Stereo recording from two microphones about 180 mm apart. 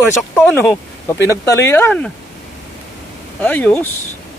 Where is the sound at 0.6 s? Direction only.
10° left (ahead or behind).